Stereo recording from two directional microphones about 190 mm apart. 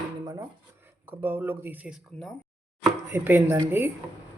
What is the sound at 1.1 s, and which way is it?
Speech, 10° right (ahead or behind).